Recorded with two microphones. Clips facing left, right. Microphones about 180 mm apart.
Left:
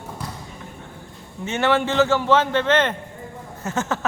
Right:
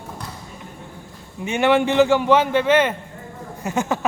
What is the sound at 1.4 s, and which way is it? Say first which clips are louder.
A man's voice: right 3 dB; 15° right (ahead or behind).